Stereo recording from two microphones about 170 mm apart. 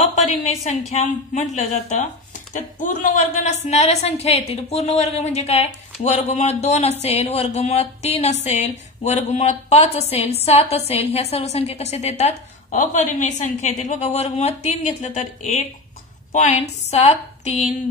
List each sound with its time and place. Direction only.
0.4 s a woman's voice: 40° left (ahead or behind)